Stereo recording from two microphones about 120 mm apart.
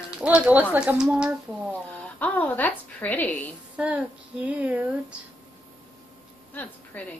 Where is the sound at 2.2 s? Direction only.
15° left (ahead or behind).